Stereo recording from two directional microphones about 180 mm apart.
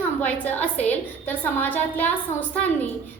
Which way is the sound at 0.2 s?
10° left (ahead or behind).